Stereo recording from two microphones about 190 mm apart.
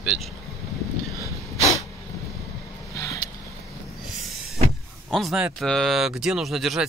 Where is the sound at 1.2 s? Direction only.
15° left (ahead or behind).